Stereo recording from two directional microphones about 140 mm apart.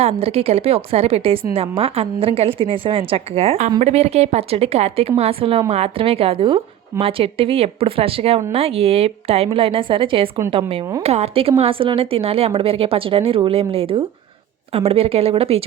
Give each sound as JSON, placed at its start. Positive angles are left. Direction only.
{"t": 0.0, "sound": "a woman's voice", "side_deg": -45}
{"t": 11.0, "sound": "a woman's voice", "side_deg": -50}